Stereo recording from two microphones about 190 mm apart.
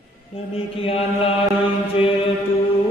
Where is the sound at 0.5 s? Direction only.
30° left (ahead or behind).